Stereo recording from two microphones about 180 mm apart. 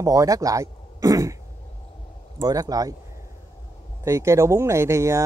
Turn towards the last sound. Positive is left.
turn(degrees=-15)  # may be behind; listen again after turning